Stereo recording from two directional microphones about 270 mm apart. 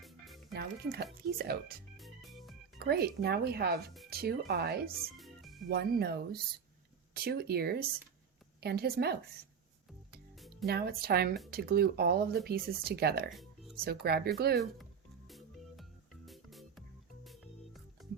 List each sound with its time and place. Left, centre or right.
0.0 s music: centre
0.5 s speech: right
2.0 s organ: centre
2.7 s speech: right
5.1 s music: centre
5.6 s speech: right
10.7 s speech: right
13.3 s music: centre
13.8 s speech: right
15.3 s music: centre